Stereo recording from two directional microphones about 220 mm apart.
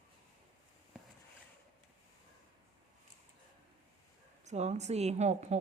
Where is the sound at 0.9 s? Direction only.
5° right (ahead or behind).